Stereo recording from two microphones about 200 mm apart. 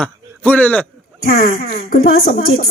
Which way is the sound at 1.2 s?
50° left (ahead or behind).